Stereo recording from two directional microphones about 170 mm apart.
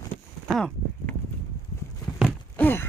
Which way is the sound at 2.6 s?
10° left (ahead or behind).